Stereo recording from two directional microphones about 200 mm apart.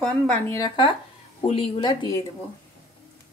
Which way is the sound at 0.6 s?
25° left (ahead or behind).